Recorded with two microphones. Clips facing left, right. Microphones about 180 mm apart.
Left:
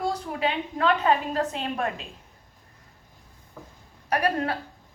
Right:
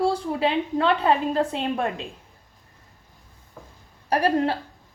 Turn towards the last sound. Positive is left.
turn(degrees=-30)  # may be behind; listen again after turning